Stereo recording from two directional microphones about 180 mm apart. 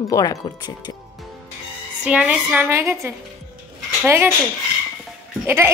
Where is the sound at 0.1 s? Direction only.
20° left (ahead or behind).